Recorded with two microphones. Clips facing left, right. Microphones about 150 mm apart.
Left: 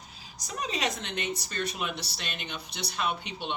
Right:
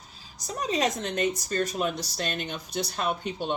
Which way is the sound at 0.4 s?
40° right (ahead or behind).